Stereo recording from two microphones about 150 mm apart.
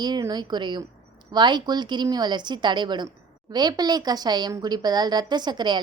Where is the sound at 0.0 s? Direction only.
30° right (ahead or behind).